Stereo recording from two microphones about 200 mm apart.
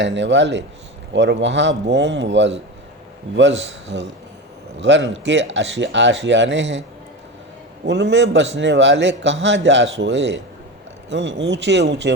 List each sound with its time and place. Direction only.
0.0 s speech: 60° right (ahead or behind)
7.9 s speech: 60° right (ahead or behind)